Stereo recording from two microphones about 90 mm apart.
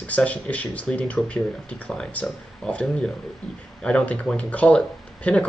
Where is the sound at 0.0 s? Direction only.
15° left (ahead or behind).